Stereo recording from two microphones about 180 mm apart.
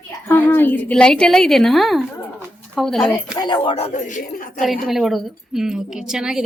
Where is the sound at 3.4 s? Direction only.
25° left (ahead or behind); by 4.7 s 50° left (ahead or behind).